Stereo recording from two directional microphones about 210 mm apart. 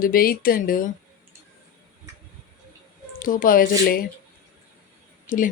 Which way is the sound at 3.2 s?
40° left (ahead or behind).